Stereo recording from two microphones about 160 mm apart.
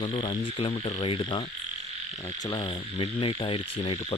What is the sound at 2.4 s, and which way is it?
Frog, 30° left (ahead or behind).